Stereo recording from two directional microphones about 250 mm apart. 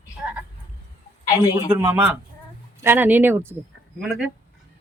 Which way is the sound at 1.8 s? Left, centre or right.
Centre.